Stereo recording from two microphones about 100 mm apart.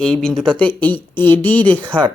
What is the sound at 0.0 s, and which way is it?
Speech, 5° left (ahead or behind).